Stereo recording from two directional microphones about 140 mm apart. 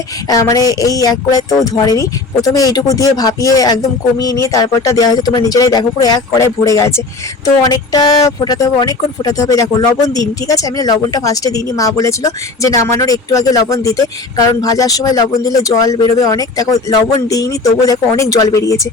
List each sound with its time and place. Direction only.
0.3 s speech: 25° left (ahead or behind)